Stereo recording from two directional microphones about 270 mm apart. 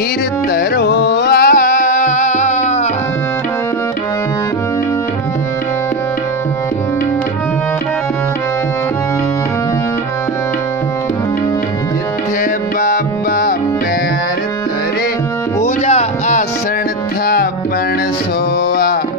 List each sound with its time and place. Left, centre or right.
0.7 s music: left
12.8 s music: left
15.6 s music: left